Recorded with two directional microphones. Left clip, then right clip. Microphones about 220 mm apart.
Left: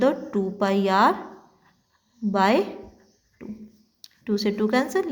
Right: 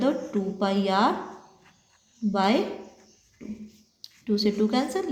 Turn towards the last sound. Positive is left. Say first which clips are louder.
# left 3 dB
turn(degrees=40)  # may be behind; listen again after turning